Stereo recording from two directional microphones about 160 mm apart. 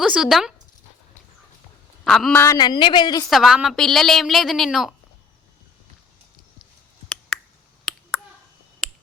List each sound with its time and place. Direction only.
0.0 s speech: 5° right (ahead or behind)
2.0 s speech: centre (ahead or behind)
2.3 s a woman's voice: 15° left (ahead or behind)
2.6 s a woman's voice: 30° left (ahead or behind)
3.2 s speech: centre (ahead or behind)